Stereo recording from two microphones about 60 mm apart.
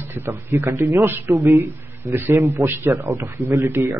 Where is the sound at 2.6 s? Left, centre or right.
Right.